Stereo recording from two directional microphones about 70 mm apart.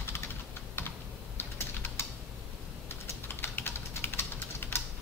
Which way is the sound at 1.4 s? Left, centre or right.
Left.